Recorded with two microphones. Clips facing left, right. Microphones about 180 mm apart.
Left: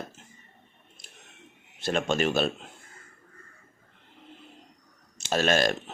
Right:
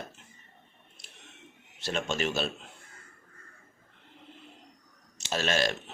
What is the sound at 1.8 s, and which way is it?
Speech, 50° left (ahead or behind).